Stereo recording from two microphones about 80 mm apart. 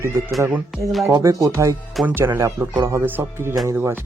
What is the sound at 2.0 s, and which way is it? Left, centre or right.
Speech, right.